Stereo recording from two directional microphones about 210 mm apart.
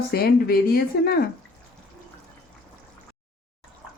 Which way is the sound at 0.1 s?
45° left (ahead or behind).